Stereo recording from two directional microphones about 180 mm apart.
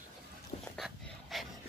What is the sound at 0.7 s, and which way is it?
Dog, centre (ahead or behind).